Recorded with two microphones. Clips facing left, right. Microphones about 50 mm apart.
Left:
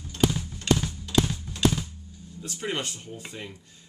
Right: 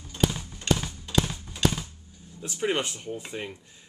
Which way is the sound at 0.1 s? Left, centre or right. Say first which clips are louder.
Left 2 dB; centre.